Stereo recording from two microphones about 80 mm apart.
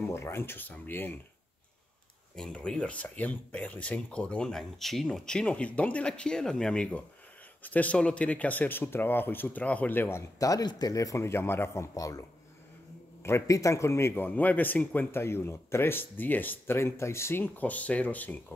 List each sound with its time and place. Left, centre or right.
0.1 s speech: left
2.3 s speech: centre; by 10.2 s left
10.4 s speech: left
15.0 s speech: left
16.7 s speech: left